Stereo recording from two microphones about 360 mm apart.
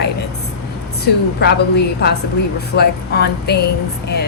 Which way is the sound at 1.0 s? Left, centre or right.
Left.